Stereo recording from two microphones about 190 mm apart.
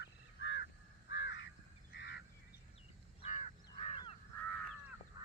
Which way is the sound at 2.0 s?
65° left (ahead or behind).